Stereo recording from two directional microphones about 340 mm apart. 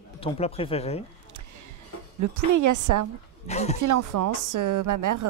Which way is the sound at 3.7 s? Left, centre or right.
Right.